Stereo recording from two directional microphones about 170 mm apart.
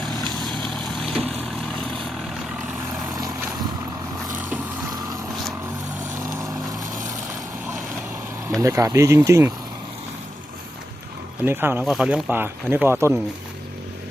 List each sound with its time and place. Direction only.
0.4 s vehicle: centre (ahead or behind)
3.2 s vehicle: 20° right (ahead or behind)
8.6 s speech: 20° right (ahead or behind)
11.4 s speech: 15° right (ahead or behind)